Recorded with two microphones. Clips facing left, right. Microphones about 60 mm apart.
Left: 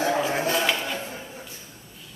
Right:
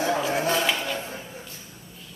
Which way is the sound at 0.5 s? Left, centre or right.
Centre.